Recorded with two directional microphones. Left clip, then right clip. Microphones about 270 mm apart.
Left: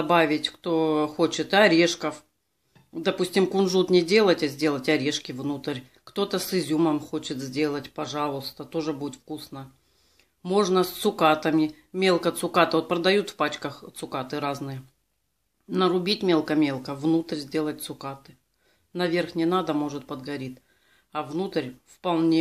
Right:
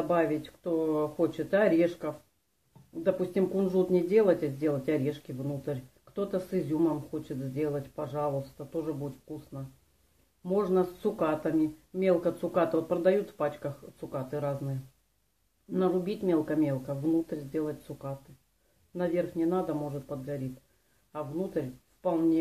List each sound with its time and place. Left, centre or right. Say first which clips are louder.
0.1 s speech: left 8 dB; left
10.4 s speech: left 5 dB; left
15.7 s speech: left 6 dB; left
21.1 s speech: left 5 dB; left